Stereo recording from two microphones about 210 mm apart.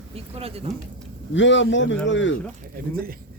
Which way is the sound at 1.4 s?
60° left (ahead or behind).